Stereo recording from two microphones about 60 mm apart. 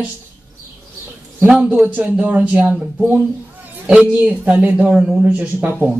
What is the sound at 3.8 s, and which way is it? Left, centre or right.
A woman's voice, centre.